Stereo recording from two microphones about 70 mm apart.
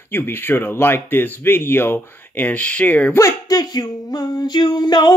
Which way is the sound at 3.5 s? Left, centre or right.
Left.